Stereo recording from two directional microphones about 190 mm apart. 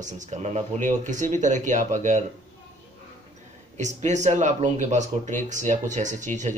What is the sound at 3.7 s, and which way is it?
Speech, 40° right (ahead or behind).